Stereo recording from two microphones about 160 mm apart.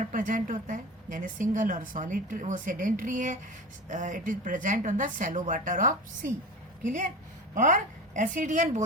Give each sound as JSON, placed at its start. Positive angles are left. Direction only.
{"t": 0.0, "sound": "a woman's voice", "side_deg": -55}
{"t": 7.5, "sound": "a woman's voice", "side_deg": -50}